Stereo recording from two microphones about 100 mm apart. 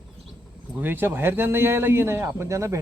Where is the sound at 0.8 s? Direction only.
20° right (ahead or behind).